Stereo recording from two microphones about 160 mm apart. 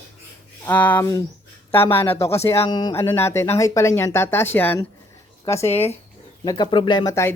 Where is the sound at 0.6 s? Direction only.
10° left (ahead or behind).